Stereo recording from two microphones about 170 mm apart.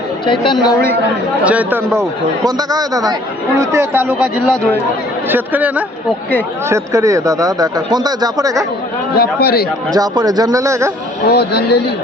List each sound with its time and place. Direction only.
0.5 s speech: 5° right (ahead or behind)
2.6 s speech: 20° right (ahead or behind)
4.4 s speech: 5° left (ahead or behind)
5.3 s speech: 10° right (ahead or behind)
9.1 s a man's voice: 65° left (ahead or behind)
9.9 s speech: 20° right (ahead or behind)
11.3 s a man's voice: 75° left (ahead or behind)